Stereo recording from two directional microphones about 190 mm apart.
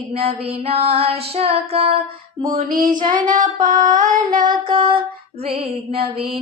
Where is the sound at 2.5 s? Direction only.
45° right (ahead or behind).